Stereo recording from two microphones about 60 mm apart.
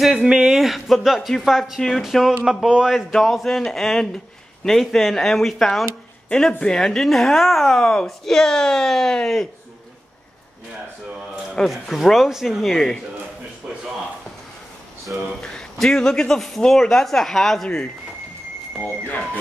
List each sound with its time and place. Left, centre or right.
0.2 s a man's voice: centre
3.1 s a woman's voice: centre
11.6 s speech: centre
15.1 s speech: right
15.4 s speech: centre
19.0 s speech: left